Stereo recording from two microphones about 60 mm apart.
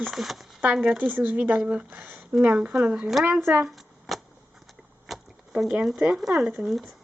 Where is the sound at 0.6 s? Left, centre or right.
Right.